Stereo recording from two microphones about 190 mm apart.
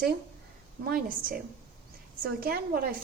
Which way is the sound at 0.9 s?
50° right (ahead or behind).